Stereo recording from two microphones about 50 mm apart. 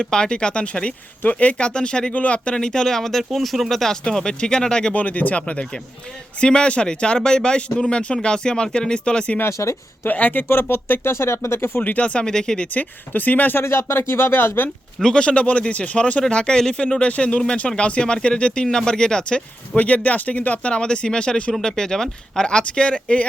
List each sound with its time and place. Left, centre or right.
0.0 s speech: centre
4.9 s speech: left
9.5 s speech: left
10.1 s speech: left
10.5 s speech: left
11.1 s speech: left
11.8 s speech: left
12.2 s speech: centre
12.7 s speech: left
13.6 s speech: left
15.0 s speech: centre
19.7 s speech: left